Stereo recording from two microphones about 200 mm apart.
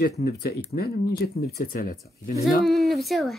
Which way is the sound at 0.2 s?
50° left (ahead or behind).